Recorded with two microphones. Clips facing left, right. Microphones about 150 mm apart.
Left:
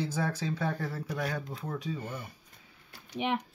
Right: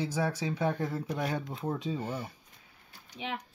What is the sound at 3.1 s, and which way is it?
Speech, 70° left (ahead or behind).